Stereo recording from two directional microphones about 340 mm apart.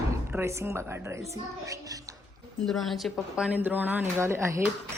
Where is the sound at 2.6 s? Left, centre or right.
Centre.